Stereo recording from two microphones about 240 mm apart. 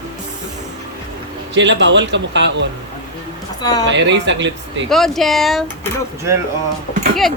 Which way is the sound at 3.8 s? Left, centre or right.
Right.